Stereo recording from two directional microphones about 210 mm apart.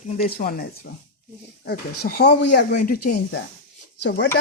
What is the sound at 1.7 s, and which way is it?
Speech, 50° left (ahead or behind).